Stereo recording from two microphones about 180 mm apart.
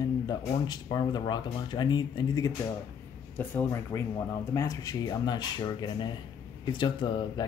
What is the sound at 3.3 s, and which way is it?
Speech, 10° left (ahead or behind).